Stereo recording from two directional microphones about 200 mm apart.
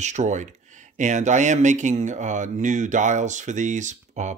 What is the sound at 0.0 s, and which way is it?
Speech, 35° right (ahead or behind).